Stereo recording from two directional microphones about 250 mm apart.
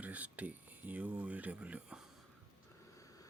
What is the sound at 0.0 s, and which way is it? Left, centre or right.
Speech, centre.